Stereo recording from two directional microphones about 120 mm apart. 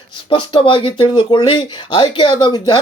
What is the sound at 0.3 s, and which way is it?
Speech, 45° left (ahead or behind).